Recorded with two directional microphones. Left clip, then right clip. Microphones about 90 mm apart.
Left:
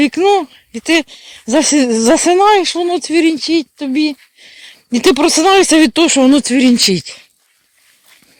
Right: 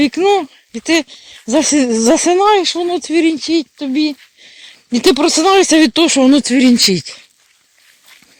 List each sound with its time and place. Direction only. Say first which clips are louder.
0.0 s speech: left 1 dB; 45° left (ahead or behind)
4.4 s a sound: left 1 dB; 35° left (ahead or behind)
5.2 s speech: left 2 dB; 55° left (ahead or behind); by 7.1 s 20° left (ahead or behind)